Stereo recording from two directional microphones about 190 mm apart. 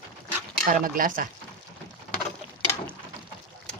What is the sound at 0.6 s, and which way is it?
Speech, 45° right (ahead or behind).